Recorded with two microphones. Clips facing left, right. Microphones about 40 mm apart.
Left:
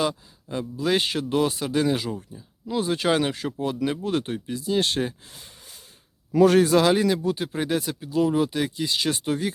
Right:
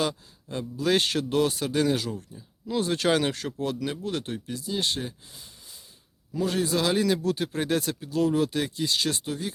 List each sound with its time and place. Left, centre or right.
0.0 s speech: centre
2.0 s speech: centre
2.3 s speech: centre; by 5.0 s left
6.3 s a man's voice: left
6.7 s speech: left
7.1 s speech: centre